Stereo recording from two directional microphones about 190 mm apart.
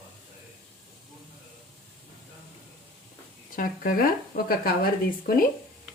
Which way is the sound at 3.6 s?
50° left (ahead or behind).